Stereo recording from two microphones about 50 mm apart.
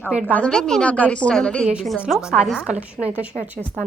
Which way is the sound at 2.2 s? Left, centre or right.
Centre.